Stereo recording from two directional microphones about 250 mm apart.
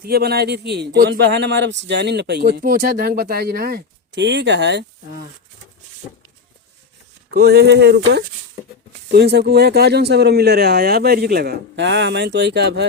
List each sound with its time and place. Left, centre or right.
0.0 s speech: right
7.3 s speech: right